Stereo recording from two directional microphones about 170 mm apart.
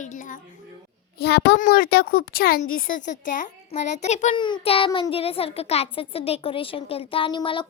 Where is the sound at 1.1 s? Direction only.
75° left (ahead or behind).